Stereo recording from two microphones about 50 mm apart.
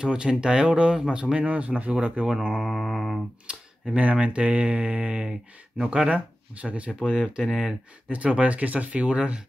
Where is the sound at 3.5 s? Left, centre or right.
Right.